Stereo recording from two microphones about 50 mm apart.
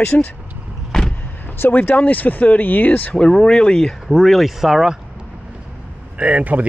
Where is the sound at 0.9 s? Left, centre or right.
Centre.